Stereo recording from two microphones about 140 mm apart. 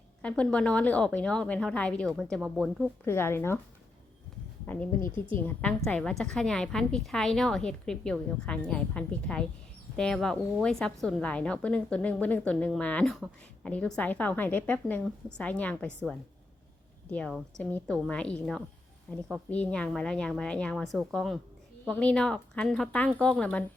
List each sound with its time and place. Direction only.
0.2 s a woman's voice: 10° left (ahead or behind)
3.0 s a woman's voice: 15° left (ahead or behind)
4.6 s a woman's voice: 15° left (ahead or behind)